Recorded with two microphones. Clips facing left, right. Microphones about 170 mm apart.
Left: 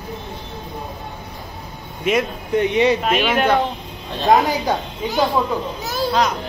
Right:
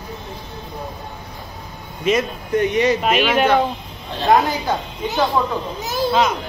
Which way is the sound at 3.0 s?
10° right (ahead or behind).